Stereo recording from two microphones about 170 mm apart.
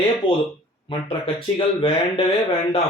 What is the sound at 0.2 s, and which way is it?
Speech, 30° left (ahead or behind).